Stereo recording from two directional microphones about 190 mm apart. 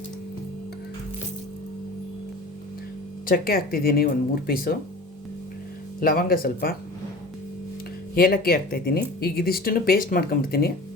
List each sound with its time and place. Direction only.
3.2 s speech: 50° left (ahead or behind)
6.0 s speech: 50° left (ahead or behind)
8.1 s speech: 50° left (ahead or behind)